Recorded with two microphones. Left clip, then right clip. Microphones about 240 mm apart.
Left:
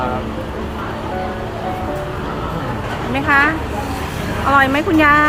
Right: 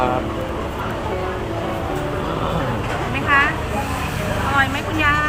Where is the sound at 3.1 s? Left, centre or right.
Left.